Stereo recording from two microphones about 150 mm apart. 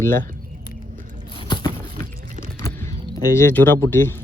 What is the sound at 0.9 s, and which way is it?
Biting, 60° right (ahead or behind).